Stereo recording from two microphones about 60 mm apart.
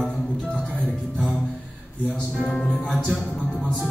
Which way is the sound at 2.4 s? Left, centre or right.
Centre.